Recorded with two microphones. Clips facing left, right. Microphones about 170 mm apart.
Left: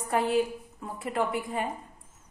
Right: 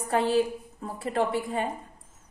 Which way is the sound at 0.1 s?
30° right (ahead or behind).